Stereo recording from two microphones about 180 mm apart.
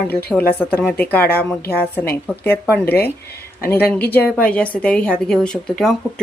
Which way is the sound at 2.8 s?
60° left (ahead or behind).